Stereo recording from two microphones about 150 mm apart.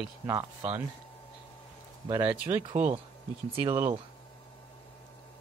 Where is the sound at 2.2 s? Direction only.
10° right (ahead or behind).